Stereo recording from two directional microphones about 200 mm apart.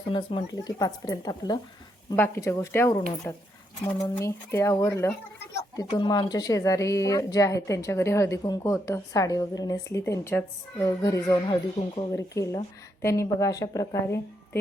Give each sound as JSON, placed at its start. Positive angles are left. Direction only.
{"t": 0.1, "sound": "a woman's voice", "side_deg": 25}